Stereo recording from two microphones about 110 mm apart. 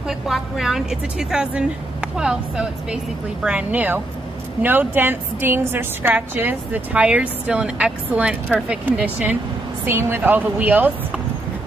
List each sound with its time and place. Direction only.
0.1 s a woman's voice: 5° right (ahead or behind)